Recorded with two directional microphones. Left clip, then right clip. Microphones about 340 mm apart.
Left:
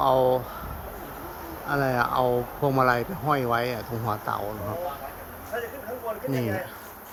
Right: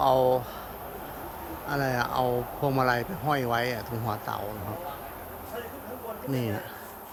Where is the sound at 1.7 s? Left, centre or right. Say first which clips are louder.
Left 4 dB; centre.